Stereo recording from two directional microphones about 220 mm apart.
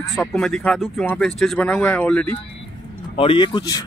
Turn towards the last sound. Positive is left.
turn(degrees=20)  # may be behind; listen again after turning